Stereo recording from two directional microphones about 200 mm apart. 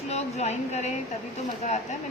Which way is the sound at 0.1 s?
35° left (ahead or behind).